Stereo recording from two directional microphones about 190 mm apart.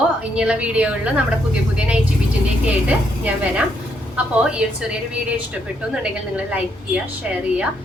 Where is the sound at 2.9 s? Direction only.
10° right (ahead or behind).